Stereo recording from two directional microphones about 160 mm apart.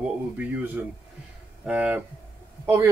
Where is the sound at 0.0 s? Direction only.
10° right (ahead or behind).